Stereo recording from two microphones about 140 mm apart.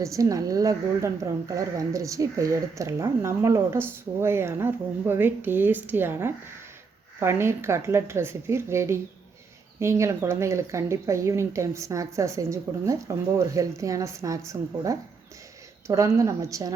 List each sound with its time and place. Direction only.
0.0 s a woman's voice: 25° right (ahead or behind)